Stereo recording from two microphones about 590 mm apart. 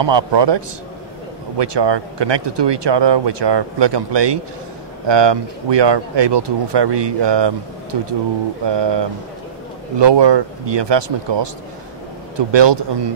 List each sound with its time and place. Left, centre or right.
0.0 s speech: right